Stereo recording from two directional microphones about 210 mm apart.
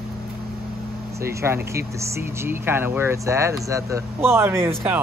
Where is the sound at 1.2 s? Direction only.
10° right (ahead or behind).